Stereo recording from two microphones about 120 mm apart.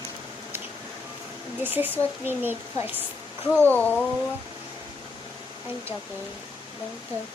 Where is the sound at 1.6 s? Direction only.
15° right (ahead or behind).